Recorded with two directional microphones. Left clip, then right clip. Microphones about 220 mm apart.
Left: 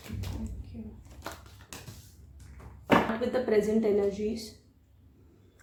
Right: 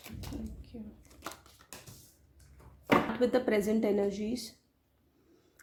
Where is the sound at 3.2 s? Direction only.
45° right (ahead or behind).